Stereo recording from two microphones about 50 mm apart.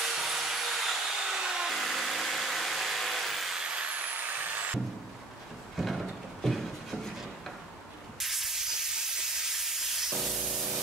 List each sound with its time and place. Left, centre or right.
0.0 s vacuum cleaner: centre
1.8 s vehicle: centre
3.5 s vehicle: right
4.1 s vehicle: right
5.8 s a sound: centre
8.2 s steam: centre
10.5 s spray: centre